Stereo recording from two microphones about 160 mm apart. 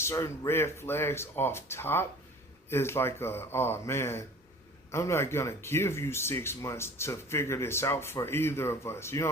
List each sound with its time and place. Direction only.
0.0 s speech: 15° left (ahead or behind)